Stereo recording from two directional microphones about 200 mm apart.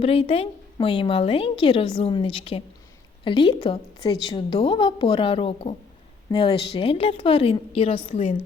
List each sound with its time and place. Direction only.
0.0 s a woman's voice: 30° left (ahead or behind)